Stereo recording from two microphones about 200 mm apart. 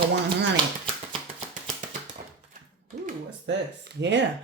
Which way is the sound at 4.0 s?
65° right (ahead or behind).